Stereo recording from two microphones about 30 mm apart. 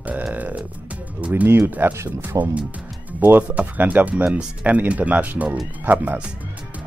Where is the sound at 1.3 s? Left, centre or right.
Right.